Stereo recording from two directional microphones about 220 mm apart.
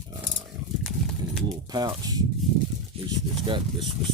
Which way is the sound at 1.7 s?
15° right (ahead or behind).